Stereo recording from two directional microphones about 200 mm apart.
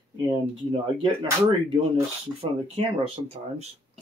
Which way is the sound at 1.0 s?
20° right (ahead or behind).